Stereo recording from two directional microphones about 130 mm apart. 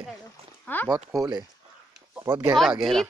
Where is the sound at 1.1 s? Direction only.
30° right (ahead or behind).